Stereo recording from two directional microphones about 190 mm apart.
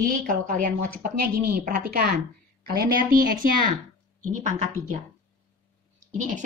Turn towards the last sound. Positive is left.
turn(degrees=-40)  # may be behind; listen again after turning